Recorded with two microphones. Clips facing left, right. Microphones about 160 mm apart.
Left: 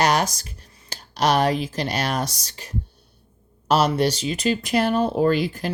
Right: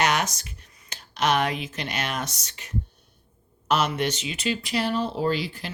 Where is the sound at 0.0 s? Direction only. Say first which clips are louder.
Left 4 dB; 35° left (ahead or behind).